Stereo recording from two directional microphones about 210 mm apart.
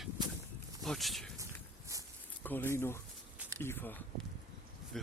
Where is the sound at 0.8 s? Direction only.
Centre (ahead or behind).